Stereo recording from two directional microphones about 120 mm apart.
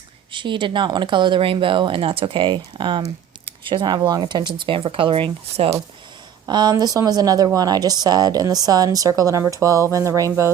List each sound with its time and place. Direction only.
0.3 s a woman's voice: 45° right (ahead or behind)
6.5 s a woman's voice: 35° right (ahead or behind)